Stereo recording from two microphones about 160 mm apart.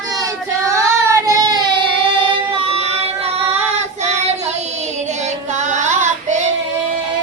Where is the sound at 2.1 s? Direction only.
35° right (ahead or behind).